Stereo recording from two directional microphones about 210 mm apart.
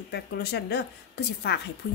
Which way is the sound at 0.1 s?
50° left (ahead or behind).